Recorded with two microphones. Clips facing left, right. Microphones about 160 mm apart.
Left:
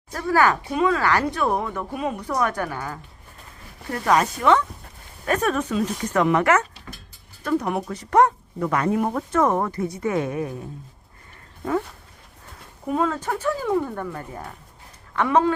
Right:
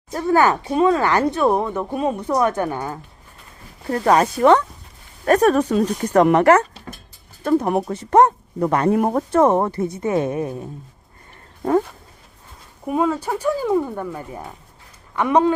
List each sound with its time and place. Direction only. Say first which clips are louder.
0.1 s speech: right 3 dB; 25° right (ahead or behind)
8.9 s speech: right 5 dB; 45° right (ahead or behind); by 10.5 s 25° right (ahead or behind)
12.9 s speech: right 3 dB; 10° right (ahead or behind)